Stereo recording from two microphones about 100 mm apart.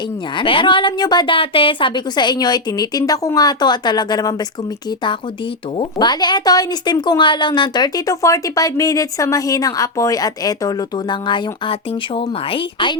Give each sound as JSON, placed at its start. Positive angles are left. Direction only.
{"t": 0.3, "sound": "a woman's voice", "side_deg": 55}
{"t": 5.7, "sound": "speech", "side_deg": 55}